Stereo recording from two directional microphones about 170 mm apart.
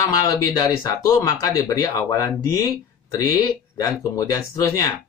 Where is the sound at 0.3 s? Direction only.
20° left (ahead or behind).